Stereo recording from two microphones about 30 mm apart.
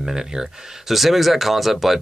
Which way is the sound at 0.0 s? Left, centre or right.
Centre.